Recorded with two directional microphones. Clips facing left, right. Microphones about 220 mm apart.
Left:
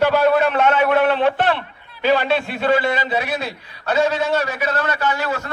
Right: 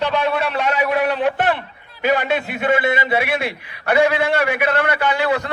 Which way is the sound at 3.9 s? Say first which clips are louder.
Right 2 dB; 15° right (ahead or behind).